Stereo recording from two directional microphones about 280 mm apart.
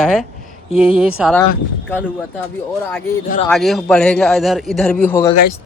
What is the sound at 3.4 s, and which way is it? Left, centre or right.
A man's voice, centre.